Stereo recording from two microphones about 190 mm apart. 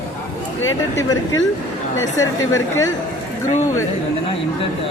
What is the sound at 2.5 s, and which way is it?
Speech, 15° left (ahead or behind).